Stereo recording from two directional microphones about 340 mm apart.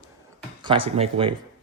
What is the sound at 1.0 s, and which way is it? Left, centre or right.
Speech, centre.